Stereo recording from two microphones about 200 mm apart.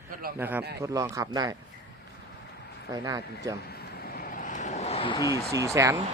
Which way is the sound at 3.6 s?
50° left (ahead or behind).